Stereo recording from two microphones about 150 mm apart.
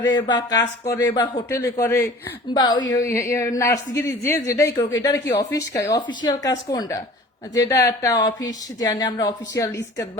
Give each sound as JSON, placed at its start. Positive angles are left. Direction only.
{"t": 0.1, "sound": "a woman's voice", "side_deg": 30}
{"t": 1.5, "sound": "a man's voice", "side_deg": 15}